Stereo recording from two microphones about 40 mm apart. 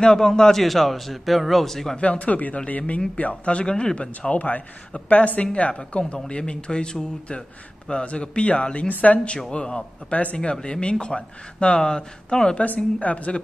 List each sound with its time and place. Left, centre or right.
0.0 s a man's voice: centre
2.0 s speech: left
8.8 s speech: left
9.5 s speech: left
12.5 s speech: left